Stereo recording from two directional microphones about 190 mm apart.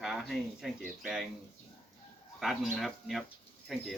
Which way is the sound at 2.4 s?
Centre (ahead or behind).